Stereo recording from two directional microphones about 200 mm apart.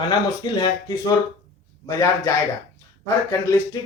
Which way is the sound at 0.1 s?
20° left (ahead or behind).